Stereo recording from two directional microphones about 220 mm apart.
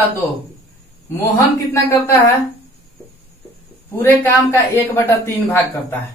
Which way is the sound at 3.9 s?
10° left (ahead or behind).